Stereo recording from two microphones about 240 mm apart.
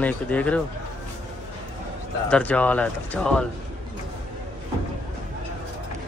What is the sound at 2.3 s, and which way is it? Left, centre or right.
Speech, centre.